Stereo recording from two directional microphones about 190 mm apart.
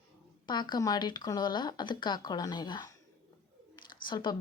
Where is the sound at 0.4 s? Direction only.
25° left (ahead or behind).